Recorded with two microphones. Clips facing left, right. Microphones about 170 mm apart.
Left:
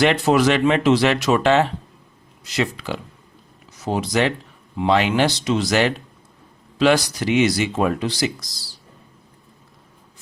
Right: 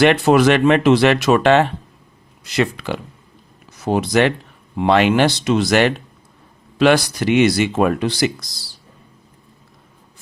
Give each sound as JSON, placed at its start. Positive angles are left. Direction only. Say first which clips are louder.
{"t": 0.0, "sound": "speech", "louder": "right 4 dB", "side_deg": -60}